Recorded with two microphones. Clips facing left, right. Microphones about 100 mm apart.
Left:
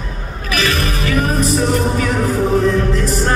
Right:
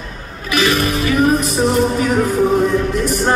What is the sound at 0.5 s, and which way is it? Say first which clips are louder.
Music: right 3 dB; 20° right (ahead or behind).